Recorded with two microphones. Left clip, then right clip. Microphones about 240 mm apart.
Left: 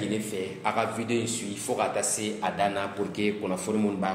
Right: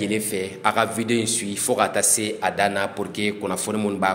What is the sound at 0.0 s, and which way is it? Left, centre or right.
A man's voice, right.